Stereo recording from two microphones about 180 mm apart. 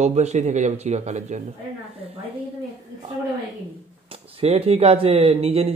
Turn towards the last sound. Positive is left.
turn(degrees=-35)  # may be behind; listen again after turning